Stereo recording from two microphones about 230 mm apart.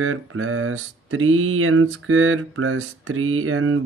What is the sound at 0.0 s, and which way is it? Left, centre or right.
Mantra, right.